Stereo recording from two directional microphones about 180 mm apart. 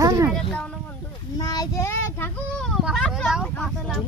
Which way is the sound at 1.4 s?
20° left (ahead or behind).